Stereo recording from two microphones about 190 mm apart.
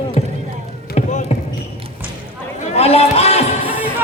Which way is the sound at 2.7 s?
30° left (ahead or behind).